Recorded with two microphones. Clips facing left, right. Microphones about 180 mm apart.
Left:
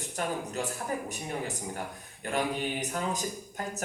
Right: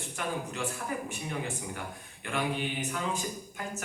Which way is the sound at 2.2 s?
40° left (ahead or behind).